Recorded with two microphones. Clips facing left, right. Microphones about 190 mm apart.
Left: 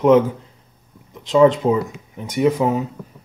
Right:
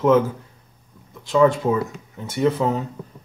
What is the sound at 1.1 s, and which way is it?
Speech, 20° left (ahead or behind).